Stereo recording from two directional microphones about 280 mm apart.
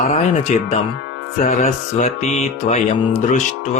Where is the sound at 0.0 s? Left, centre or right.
Left.